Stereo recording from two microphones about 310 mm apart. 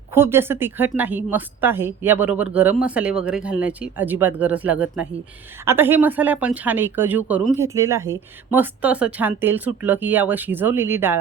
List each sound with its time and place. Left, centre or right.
0.1 s speech: centre